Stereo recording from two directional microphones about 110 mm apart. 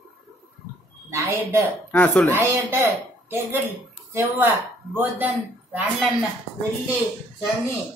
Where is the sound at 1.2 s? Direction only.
15° right (ahead or behind).